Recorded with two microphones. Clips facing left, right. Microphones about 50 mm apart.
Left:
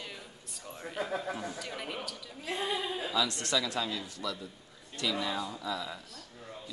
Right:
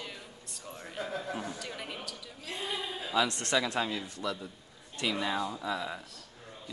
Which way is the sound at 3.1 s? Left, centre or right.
Right.